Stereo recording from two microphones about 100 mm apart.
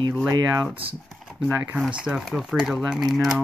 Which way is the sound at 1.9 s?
5° right (ahead or behind).